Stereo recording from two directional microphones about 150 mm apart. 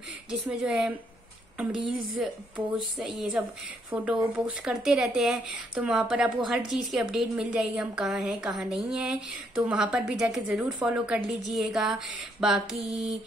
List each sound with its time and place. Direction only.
0.3 s speech: 5° right (ahead or behind)
3.0 s speech: centre (ahead or behind)